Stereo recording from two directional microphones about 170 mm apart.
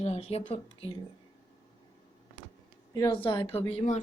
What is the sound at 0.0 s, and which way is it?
Speech, 35° left (ahead or behind).